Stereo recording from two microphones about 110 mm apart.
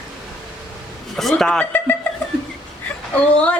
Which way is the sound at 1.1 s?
Centre (ahead or behind).